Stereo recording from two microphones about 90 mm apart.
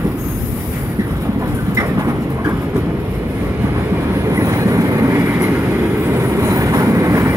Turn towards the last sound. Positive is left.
turn(degrees=-35)  # may be behind; listen again after turning